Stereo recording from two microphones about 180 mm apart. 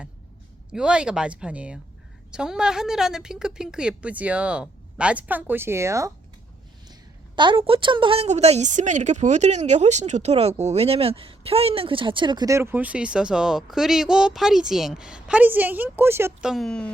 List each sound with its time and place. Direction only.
0.7 s a woman's voice: 5° right (ahead or behind)
7.3 s a woman's voice: 25° right (ahead or behind)
16.5 s a woman's voice: centre (ahead or behind)